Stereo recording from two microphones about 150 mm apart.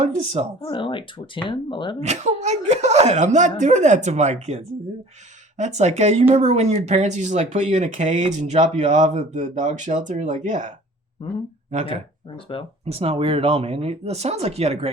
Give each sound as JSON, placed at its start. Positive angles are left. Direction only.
{"t": 0.0, "sound": "speech", "side_deg": -50}
{"t": 0.6, "sound": "speech", "side_deg": 35}
{"t": 2.0, "sound": "speech", "side_deg": -50}
{"t": 11.2, "sound": "speech", "side_deg": 35}
{"t": 12.8, "sound": "speech", "side_deg": -40}